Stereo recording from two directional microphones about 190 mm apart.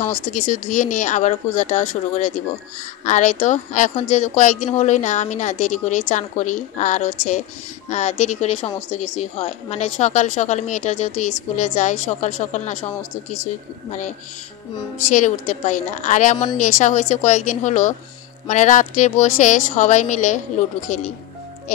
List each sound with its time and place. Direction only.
0.3 s speech: 40° left (ahead or behind)
15.0 s speech: 40° left (ahead or behind)